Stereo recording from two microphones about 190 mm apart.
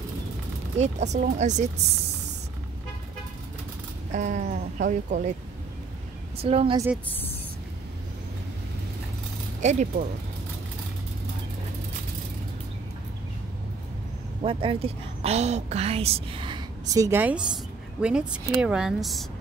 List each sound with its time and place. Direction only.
0.7 s speech: 40° right (ahead or behind)
4.1 s speech: 40° right (ahead or behind)
6.3 s a woman's voice: 30° right (ahead or behind)
9.6 s speech: 40° right (ahead or behind)
14.4 s a woman's voice: 30° right (ahead or behind); by 19.2 s centre (ahead or behind)